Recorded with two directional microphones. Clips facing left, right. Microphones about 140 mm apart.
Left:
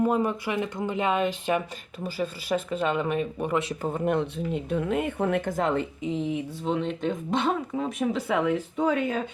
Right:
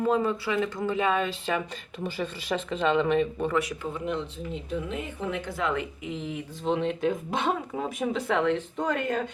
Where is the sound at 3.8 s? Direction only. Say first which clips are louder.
Left 5 dB; 50° left (ahead or behind).